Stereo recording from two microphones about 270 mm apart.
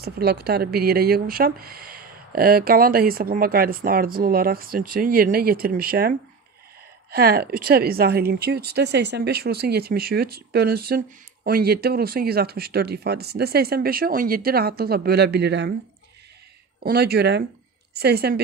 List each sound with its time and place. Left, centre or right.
0.0 s speech: right
16.8 s a woman's voice: right